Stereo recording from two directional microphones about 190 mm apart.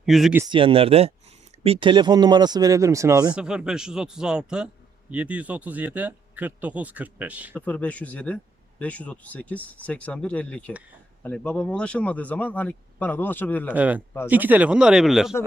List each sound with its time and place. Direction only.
0.0 s speech: centre (ahead or behind)
0.5 s speech: 30° right (ahead or behind)
3.3 s speech: 5° right (ahead or behind)
7.5 s speech: 10° left (ahead or behind)
13.7 s speech: 5° right (ahead or behind)